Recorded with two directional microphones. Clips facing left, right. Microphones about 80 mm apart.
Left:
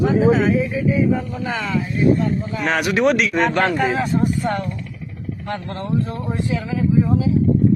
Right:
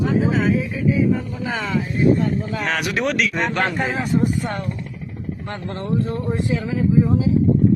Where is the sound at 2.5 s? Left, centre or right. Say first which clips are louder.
Left 3 dB; centre.